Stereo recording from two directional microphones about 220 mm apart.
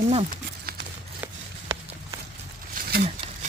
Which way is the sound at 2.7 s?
40° right (ahead or behind).